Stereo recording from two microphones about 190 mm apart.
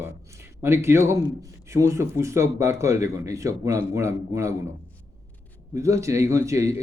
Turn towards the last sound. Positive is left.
turn(degrees=-15)  # may be behind; listen again after turning